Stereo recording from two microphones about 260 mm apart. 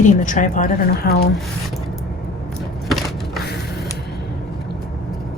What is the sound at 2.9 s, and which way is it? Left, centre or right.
Crushing, centre.